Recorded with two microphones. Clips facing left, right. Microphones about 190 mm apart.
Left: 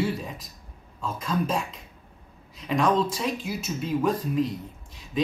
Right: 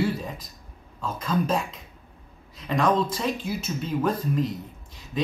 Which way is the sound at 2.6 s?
5° left (ahead or behind).